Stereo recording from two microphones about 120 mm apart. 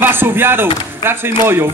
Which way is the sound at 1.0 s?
20° right (ahead or behind).